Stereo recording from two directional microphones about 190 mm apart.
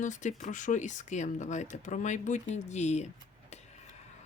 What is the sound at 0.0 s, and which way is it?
Speech, 40° left (ahead or behind).